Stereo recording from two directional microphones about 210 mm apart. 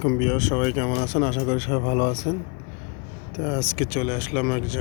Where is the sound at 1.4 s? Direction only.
20° left (ahead or behind).